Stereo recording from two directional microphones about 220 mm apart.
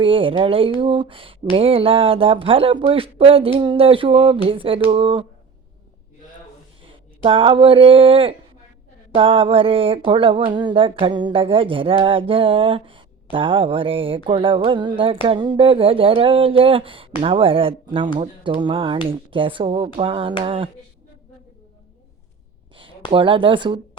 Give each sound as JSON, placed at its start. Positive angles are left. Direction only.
{"t": 0.0, "sound": "speech", "side_deg": -25}
{"t": 6.8, "sound": "speech", "side_deg": -25}
{"t": 22.8, "sound": "speech", "side_deg": -25}